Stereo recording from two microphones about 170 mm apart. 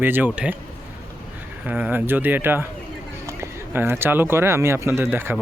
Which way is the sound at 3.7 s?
15° right (ahead or behind).